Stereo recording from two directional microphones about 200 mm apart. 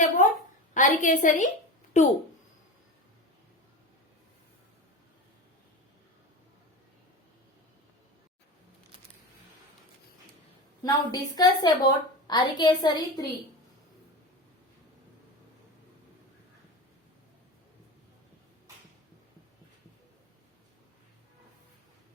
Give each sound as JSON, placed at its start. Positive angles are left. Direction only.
{"t": 0.0, "sound": "a sound", "side_deg": 40}
{"t": 0.7, "sound": "a woman's voice", "side_deg": 40}
{"t": 10.8, "sound": "a woman's voice", "side_deg": 20}